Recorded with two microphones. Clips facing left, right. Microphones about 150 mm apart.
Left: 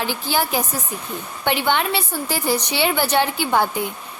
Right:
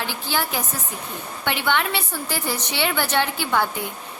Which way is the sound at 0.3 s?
15° left (ahead or behind).